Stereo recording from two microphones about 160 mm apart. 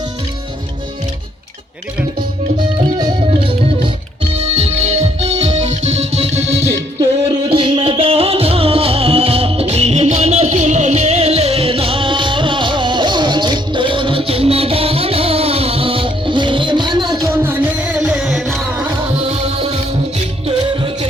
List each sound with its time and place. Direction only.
3.0 s music: 30° right (ahead or behind)
7.5 s music: 35° right (ahead or behind); by 18.6 s centre (ahead or behind)
18.7 s music: 10° right (ahead or behind)
19.2 s music: 40° right (ahead or behind)